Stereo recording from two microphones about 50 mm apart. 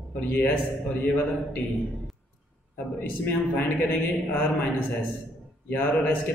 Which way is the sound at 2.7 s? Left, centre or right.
Left.